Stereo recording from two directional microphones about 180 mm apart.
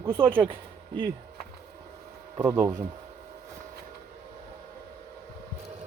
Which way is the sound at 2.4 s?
15° right (ahead or behind).